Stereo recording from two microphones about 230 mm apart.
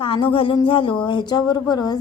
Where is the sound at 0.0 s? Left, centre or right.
Left.